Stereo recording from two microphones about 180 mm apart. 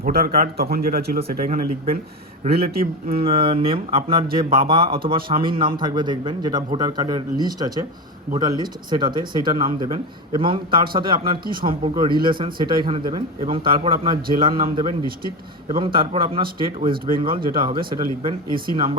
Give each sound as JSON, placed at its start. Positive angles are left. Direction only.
{"t": 0.0, "sound": "speech", "side_deg": -55}
{"t": 3.2, "sound": "speech", "side_deg": -30}